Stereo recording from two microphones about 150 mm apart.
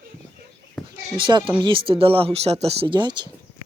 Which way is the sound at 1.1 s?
35° right (ahead or behind).